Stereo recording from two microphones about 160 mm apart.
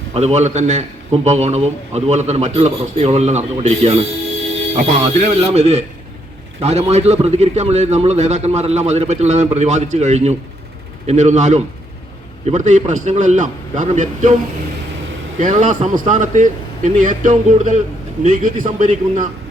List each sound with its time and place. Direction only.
0.1 s a man's voice: 45° right (ahead or behind)
15.4 s a man's voice: 55° right (ahead or behind)